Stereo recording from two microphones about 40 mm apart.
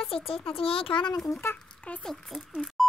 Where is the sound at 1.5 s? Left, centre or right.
Left.